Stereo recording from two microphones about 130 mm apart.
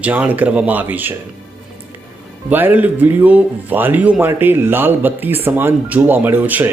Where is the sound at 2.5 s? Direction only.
15° right (ahead or behind).